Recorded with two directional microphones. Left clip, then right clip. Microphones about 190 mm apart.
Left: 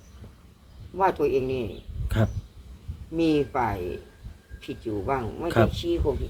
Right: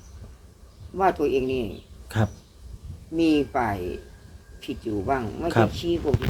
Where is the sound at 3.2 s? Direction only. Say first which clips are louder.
Right 1 dB; 20° right (ahead or behind).